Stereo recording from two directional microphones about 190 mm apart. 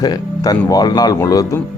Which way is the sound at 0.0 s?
20° left (ahead or behind).